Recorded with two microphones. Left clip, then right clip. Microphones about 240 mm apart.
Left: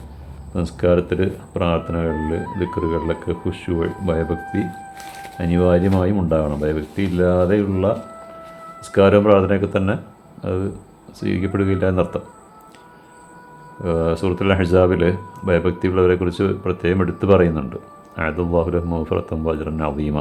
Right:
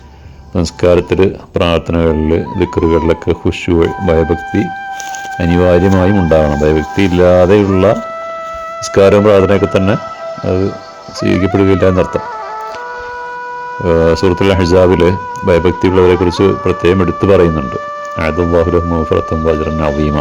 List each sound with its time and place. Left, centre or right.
0.5 s speech: right
9.0 s speech: right
13.8 s speech: right